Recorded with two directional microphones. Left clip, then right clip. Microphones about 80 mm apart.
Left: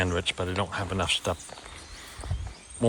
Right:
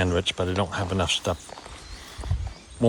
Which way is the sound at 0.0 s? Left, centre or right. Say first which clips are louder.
Right 3 dB; right.